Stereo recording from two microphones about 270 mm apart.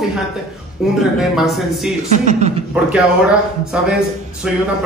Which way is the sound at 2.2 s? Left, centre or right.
Right.